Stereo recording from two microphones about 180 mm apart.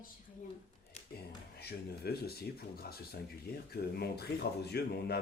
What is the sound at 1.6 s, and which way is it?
Speech, 60° left (ahead or behind).